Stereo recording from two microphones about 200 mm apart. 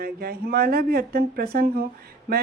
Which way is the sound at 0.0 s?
50° right (ahead or behind).